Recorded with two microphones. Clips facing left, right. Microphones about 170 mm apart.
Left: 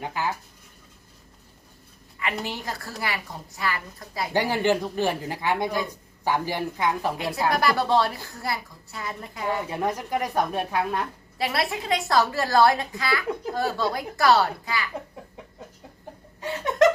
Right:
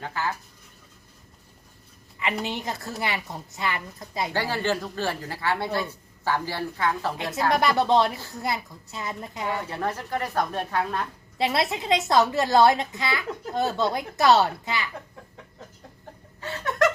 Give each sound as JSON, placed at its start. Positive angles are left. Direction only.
{"t": 0.0, "sound": "speech", "side_deg": 15}
{"t": 2.4, "sound": "a woman's voice", "side_deg": -20}
{"t": 4.3, "sound": "speech", "side_deg": 15}
{"t": 7.5, "sound": "a woman's voice", "side_deg": -20}
{"t": 9.6, "sound": "speech", "side_deg": 15}
{"t": 11.3, "sound": "a woman's voice", "side_deg": -20}
{"t": 16.4, "sound": "laughter", "side_deg": 20}